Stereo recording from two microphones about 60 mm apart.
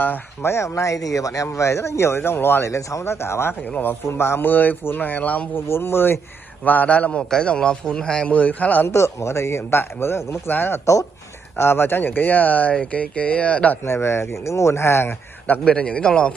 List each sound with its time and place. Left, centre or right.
0.0 s speech: left
0.5 s speech: left
5.7 s a man's voice: left
8.8 s a man's voice: left
13.8 s speech: left
15.6 s a man's voice: centre